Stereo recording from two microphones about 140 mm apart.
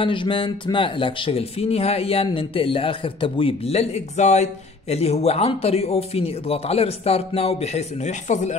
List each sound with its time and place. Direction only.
0.0 s speech: 35° left (ahead or behind); by 8.5 s 55° left (ahead or behind)